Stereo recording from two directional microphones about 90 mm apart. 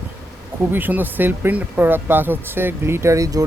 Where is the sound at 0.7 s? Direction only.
20° right (ahead or behind).